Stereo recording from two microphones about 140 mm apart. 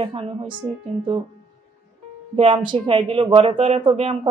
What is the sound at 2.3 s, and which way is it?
Speech, 40° right (ahead or behind).